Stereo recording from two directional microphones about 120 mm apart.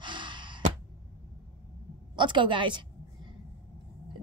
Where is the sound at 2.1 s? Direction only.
40° right (ahead or behind).